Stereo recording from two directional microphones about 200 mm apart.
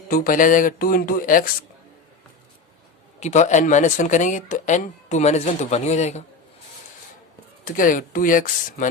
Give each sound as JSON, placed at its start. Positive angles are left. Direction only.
{"t": 0.1, "sound": "speech", "side_deg": 45}
{"t": 3.2, "sound": "speech", "side_deg": 35}
{"t": 7.6, "sound": "speech", "side_deg": 40}